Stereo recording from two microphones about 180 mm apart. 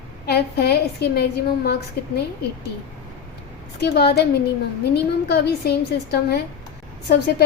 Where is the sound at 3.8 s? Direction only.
65° left (ahead or behind).